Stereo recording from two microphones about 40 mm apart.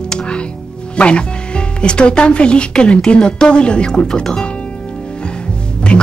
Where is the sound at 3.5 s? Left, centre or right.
Left.